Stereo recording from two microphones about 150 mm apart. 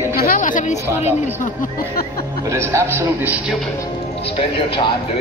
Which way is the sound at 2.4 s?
20° right (ahead or behind).